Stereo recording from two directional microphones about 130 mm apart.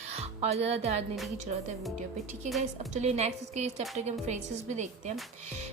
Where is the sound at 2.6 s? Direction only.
60° right (ahead or behind).